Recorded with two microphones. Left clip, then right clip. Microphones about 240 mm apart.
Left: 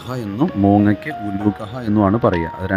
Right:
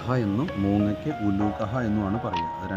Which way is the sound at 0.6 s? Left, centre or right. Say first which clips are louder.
Left 11 dB; left.